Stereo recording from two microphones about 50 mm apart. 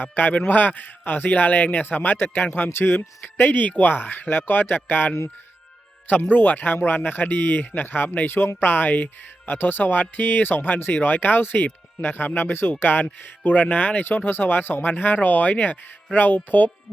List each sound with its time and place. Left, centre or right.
0.0 s speech: left
6.3 s speech: left